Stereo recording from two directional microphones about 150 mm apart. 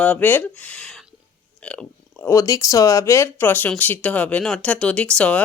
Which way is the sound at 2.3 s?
20° left (ahead or behind).